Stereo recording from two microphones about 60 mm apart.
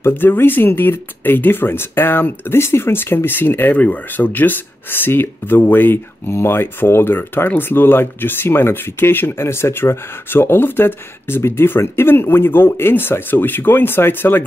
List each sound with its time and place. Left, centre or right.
0.0 s speech: left